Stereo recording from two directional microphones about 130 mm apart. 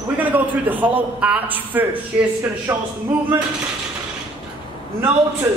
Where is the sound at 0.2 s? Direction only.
10° right (ahead or behind).